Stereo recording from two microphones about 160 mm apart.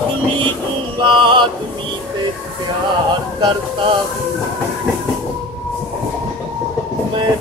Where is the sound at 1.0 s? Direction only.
30° right (ahead or behind).